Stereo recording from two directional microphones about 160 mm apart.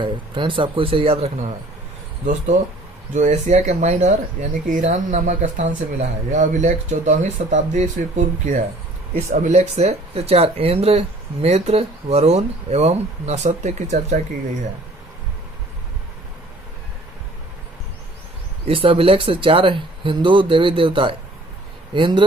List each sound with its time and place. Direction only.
0.0 s speech: 30° right (ahead or behind)
3.1 s speech: 50° right (ahead or behind)
18.7 s speech: 35° right (ahead or behind)